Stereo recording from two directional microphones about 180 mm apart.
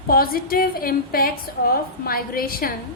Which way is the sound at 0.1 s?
55° left (ahead or behind).